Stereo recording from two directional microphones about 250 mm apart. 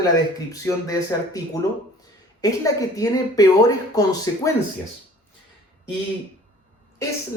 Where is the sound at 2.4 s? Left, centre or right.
Centre.